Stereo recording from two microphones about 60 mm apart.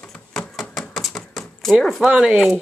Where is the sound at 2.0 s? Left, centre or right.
Centre.